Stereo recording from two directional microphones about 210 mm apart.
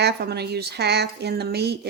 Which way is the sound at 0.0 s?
50° right (ahead or behind).